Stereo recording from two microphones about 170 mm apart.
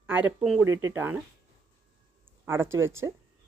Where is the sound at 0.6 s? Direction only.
15° right (ahead or behind).